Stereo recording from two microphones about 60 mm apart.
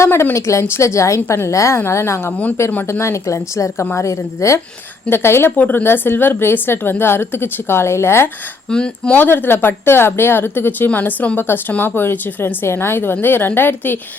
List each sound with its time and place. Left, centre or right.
0.0 s a woman's voice: left
5.0 s a woman's voice: left
5.5 s a woman's voice: left
8.7 s speech: centre
9.1 s a woman's voice: left
11.3 s a woman's voice: left
12.6 s a woman's voice: left